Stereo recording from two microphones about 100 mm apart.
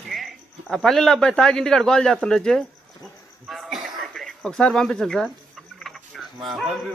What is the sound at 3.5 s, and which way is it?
Cough, centre (ahead or behind).